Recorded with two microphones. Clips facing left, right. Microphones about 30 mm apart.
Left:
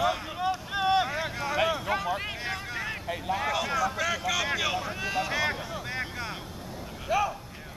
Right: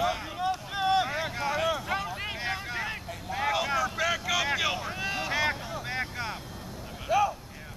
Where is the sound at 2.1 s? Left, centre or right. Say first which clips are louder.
Even; centre.